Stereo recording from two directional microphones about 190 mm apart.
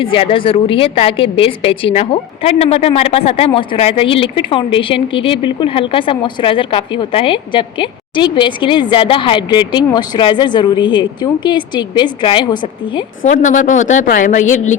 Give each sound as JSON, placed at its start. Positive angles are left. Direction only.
{"t": 0.0, "sound": "a woman's voice", "side_deg": 30}
{"t": 13.2, "sound": "a woman's voice", "side_deg": 40}